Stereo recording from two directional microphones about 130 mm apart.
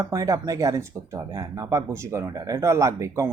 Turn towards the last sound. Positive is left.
turn(degrees=-25)  # may be behind; listen again after turning